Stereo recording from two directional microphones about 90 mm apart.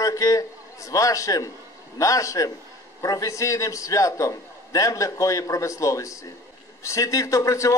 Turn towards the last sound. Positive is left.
turn(degrees=35)  # may be behind; listen again after turning